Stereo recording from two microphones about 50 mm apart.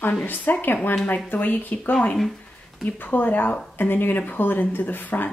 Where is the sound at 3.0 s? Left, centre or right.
Left.